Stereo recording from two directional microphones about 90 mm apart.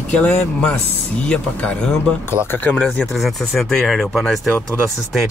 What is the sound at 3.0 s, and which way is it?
Speech, centre (ahead or behind).